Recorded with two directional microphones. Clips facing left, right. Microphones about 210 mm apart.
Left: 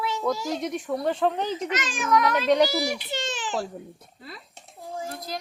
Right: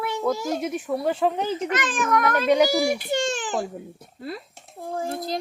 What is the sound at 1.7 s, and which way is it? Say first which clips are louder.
A child's voice: left 1 dB; 55° right (ahead or behind).